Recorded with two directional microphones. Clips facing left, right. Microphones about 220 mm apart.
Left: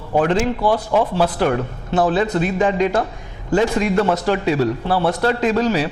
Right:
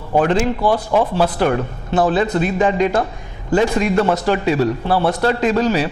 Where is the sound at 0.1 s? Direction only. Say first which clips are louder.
Right 1 dB; 20° right (ahead or behind).